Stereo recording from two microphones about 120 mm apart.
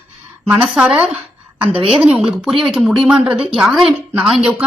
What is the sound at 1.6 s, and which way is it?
Speech, 50° right (ahead or behind).